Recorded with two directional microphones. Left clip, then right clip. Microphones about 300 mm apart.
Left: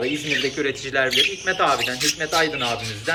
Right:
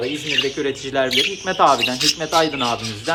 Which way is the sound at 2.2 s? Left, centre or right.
Right.